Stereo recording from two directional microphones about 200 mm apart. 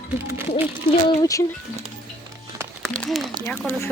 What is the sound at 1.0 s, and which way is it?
Speech, 15° left (ahead or behind).